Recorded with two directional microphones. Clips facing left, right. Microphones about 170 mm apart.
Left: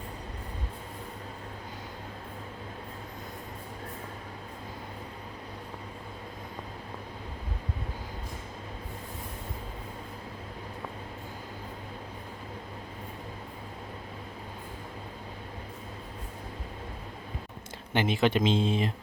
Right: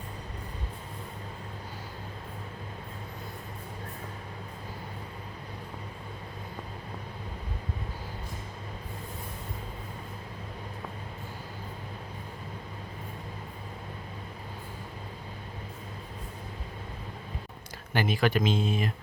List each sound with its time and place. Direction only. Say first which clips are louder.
17.9 s speech: left 1 dB; 20° left (ahead or behind)